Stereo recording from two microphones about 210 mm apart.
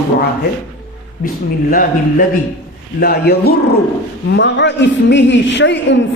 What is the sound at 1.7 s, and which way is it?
A man's voice, 40° left (ahead or behind).